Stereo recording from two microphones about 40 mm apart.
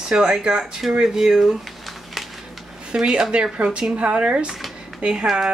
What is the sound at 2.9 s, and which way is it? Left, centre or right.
Speech, centre.